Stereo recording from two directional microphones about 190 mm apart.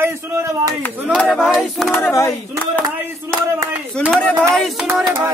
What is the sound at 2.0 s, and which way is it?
Speech, 15° left (ahead or behind).